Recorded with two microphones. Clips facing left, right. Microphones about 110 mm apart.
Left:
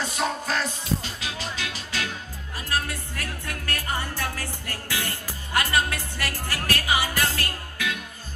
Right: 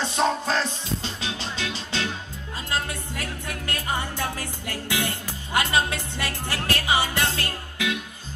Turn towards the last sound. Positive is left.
turn(degrees=-20)  # may be behind; listen again after turning